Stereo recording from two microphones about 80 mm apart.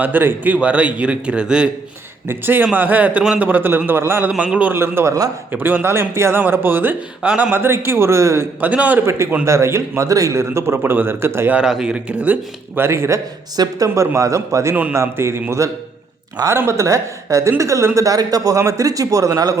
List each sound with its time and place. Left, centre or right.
0.0 s a man's voice: right
2.2 s a man's voice: right
7.2 s a man's voice: centre
7.5 s a man's voice: right
8.6 s a man's voice: centre
9.0 s a man's voice: right
11.5 s a man's voice: centre; by 19.5 s right